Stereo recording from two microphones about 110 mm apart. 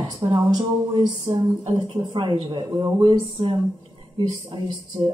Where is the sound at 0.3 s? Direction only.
40° right (ahead or behind).